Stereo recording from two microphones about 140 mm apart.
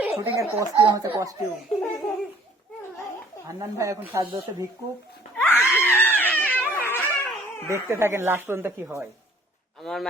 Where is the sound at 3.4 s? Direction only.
25° right (ahead or behind).